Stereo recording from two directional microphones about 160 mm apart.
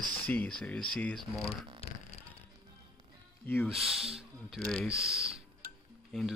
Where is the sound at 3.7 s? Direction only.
5° right (ahead or behind).